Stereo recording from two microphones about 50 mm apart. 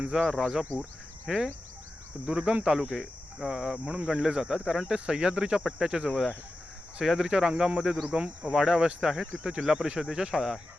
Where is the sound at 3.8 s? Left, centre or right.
Right.